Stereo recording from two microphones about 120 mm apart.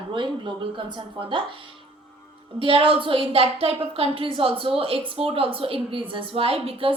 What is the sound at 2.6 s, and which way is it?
A woman's voice, 50° right (ahead or behind).